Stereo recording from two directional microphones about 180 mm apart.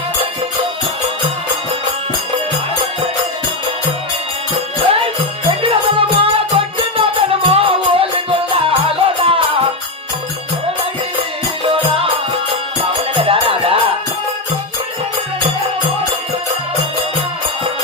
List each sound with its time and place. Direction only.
5.0 s music: 30° right (ahead or behind)
13.1 s music: 30° right (ahead or behind)